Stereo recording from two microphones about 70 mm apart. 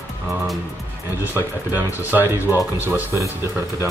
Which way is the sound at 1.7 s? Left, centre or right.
Right.